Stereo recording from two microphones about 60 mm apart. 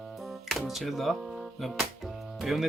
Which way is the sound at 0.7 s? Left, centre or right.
Centre.